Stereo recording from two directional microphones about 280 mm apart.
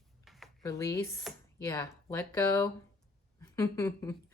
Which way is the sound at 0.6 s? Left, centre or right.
Centre.